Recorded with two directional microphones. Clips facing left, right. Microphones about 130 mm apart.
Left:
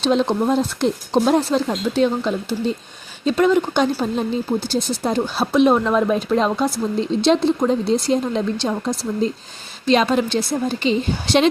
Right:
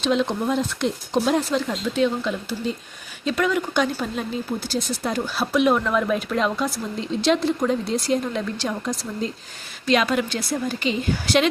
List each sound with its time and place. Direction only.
0.0 s speech: 35° left (ahead or behind)